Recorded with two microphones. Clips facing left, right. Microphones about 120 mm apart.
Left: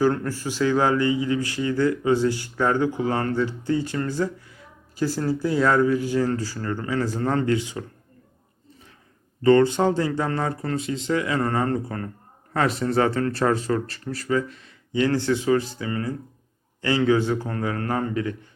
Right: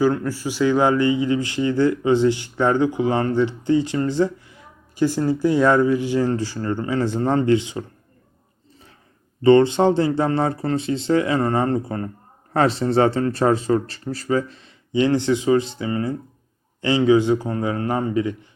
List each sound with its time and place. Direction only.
0.0 s a man's voice: 5° right (ahead or behind); by 7.9 s 25° right (ahead or behind)
9.4 s a man's voice: 20° right (ahead or behind)